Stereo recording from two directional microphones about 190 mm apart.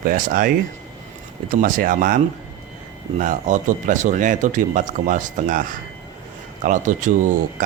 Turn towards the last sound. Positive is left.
turn(degrees=-40)  # may be behind; listen again after turning